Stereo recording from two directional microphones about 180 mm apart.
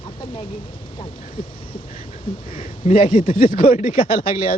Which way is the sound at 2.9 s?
50° left (ahead or behind).